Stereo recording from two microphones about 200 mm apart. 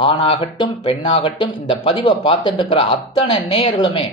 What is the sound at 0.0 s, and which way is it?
Speech, 30° left (ahead or behind).